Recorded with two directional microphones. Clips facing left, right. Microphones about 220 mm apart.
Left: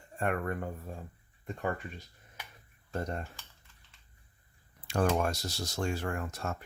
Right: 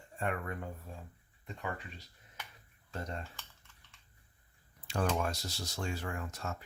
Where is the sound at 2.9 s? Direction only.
50° left (ahead or behind).